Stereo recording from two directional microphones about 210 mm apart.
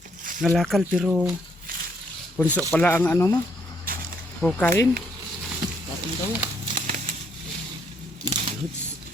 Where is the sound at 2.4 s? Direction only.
10° right (ahead or behind).